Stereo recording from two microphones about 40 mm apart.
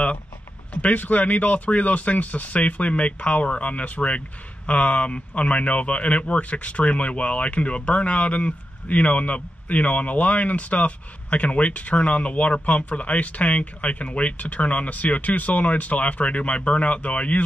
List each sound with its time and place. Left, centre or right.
0.7 s speech: left